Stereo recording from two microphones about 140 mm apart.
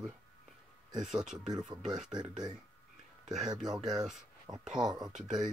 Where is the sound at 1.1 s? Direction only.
5° right (ahead or behind).